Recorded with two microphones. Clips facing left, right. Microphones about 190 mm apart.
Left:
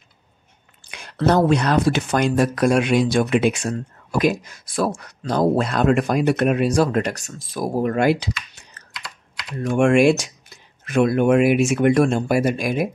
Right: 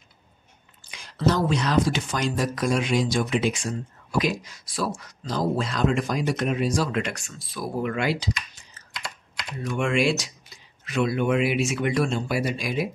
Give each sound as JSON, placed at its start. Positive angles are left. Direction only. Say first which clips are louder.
{"t": 0.8, "sound": "speech", "louder": "left 4 dB", "side_deg": 60}
{"t": 6.9, "sound": "speech", "louder": "left 6 dB", "side_deg": 40}
{"t": 8.2, "sound": "computer keyboard", "louder": "left 1 dB", "side_deg": 65}
{"t": 8.9, "sound": "typing", "louder": "right 1 dB", "side_deg": -25}
{"t": 9.6, "sound": "speech", "louder": "left 8 dB", "side_deg": 50}